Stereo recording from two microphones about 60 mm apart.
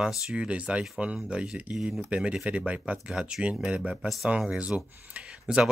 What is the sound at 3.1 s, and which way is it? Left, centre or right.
Speech, centre.